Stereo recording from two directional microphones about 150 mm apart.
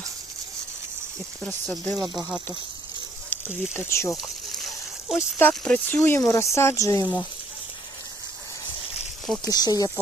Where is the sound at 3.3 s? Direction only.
15° left (ahead or behind).